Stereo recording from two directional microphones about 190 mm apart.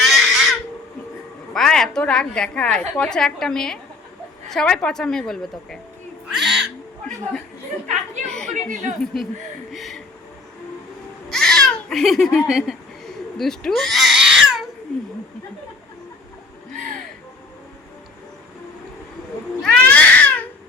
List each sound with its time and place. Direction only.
0.0 s a sound: centre (ahead or behind)
1.5 s a woman's voice: 5° left (ahead or behind)
6.3 s owl: centre (ahead or behind)
8.2 s chatter: 5° left (ahead or behind)
8.4 s speech: 35° right (ahead or behind)
9.7 s speech: centre (ahead or behind)
11.3 s a sound: 5° left (ahead or behind)
19.6 s cat: 5° left (ahead or behind)